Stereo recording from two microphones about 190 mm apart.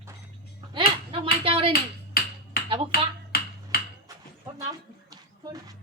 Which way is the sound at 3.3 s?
50° left (ahead or behind).